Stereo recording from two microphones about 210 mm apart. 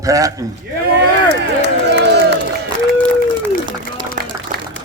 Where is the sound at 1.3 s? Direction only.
55° right (ahead or behind).